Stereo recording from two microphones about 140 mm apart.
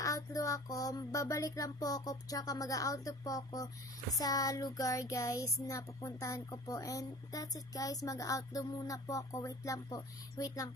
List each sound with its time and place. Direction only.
0.0 s child singing: 25° left (ahead or behind)